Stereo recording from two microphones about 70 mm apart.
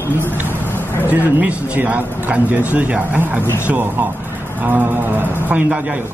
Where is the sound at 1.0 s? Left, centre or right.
Right.